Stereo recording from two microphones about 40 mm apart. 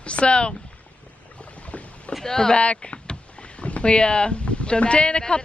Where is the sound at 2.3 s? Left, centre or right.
Centre.